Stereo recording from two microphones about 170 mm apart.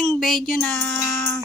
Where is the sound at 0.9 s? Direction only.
15° left (ahead or behind).